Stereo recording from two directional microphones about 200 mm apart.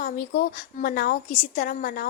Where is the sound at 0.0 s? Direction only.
45° left (ahead or behind).